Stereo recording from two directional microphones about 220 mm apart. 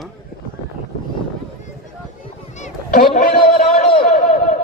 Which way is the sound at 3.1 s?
45° left (ahead or behind).